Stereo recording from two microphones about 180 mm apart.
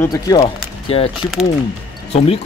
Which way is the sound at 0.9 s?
30° left (ahead or behind).